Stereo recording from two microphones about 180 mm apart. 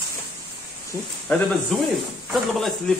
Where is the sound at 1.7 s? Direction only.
5° left (ahead or behind).